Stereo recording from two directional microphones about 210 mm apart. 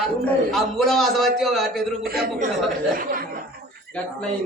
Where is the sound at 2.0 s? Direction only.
45° right (ahead or behind).